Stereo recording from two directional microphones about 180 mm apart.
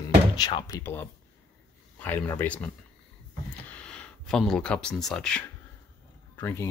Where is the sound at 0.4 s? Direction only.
25° left (ahead or behind); by 5.4 s 5° left (ahead or behind).